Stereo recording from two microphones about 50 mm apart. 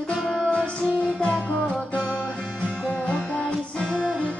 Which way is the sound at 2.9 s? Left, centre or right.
Left.